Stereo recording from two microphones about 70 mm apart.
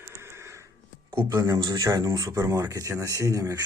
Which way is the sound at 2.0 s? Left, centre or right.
Right.